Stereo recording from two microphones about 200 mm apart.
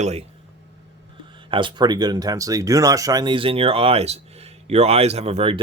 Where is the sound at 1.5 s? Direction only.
25° right (ahead or behind).